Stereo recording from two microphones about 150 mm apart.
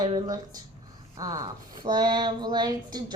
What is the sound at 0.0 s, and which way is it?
Speech, 25° right (ahead or behind).